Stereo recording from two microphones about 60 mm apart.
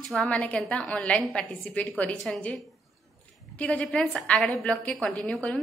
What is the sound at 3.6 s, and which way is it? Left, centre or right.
A woman's voice, left.